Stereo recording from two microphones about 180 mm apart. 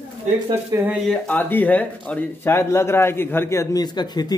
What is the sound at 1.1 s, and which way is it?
Speech, 10° left (ahead or behind).